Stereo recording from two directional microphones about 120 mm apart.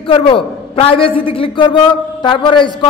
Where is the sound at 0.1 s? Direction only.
50° left (ahead or behind).